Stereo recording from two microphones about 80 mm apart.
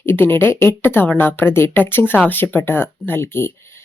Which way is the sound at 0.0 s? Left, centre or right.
Left.